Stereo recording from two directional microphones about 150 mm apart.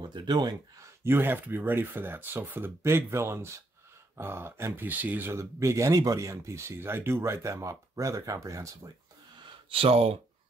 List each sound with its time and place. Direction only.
0.0 s speech: 30° right (ahead or behind)
1.0 s speech: 15° right (ahead or behind)
9.7 s speech: 40° right (ahead or behind)